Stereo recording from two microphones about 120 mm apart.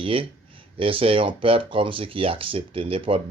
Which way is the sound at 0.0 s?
50° right (ahead or behind).